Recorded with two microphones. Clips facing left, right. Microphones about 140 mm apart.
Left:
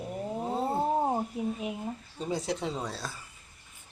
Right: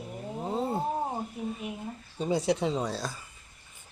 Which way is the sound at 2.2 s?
Centre (ahead or behind).